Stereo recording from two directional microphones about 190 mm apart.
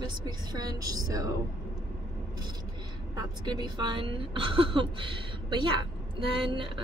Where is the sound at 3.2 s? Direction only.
20° right (ahead or behind).